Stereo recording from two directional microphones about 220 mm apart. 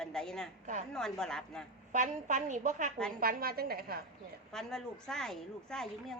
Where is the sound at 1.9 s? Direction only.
35° right (ahead or behind).